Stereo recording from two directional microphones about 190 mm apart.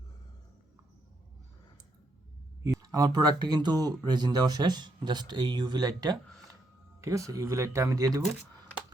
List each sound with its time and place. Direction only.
2.8 s speech: 20° right (ahead or behind)